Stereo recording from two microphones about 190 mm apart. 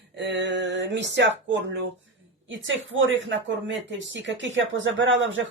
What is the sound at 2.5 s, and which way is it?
A woman's voice, 80° right.